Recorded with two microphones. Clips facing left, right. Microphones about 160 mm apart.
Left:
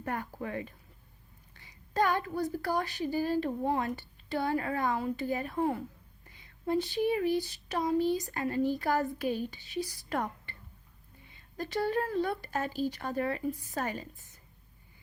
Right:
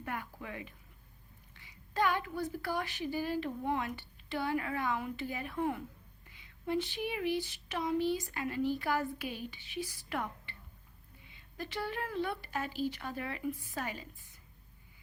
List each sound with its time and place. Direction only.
0.0 s speech: 40° left (ahead or behind)
1.9 s a woman's voice: 40° left (ahead or behind)